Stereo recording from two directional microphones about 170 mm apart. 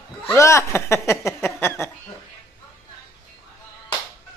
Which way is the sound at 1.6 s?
15° left (ahead or behind).